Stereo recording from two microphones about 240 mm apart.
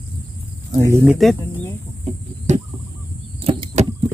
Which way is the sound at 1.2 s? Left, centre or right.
Centre.